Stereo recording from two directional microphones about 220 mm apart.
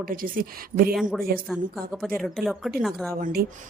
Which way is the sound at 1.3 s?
40° right (ahead or behind).